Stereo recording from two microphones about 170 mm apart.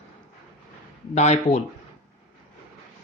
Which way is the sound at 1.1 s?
40° left (ahead or behind).